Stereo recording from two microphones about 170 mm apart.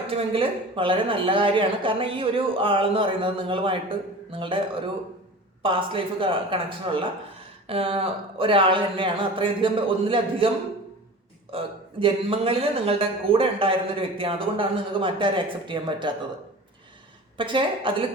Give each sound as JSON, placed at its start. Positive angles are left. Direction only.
{"t": 0.1, "sound": "speech", "side_deg": -35}
{"t": 5.6, "sound": "speech", "side_deg": -30}
{"t": 11.5, "sound": "a man's voice", "side_deg": -30}
{"t": 17.3, "sound": "a man's voice", "side_deg": -30}